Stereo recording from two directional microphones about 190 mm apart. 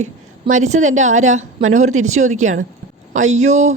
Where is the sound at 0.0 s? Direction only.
40° right (ahead or behind).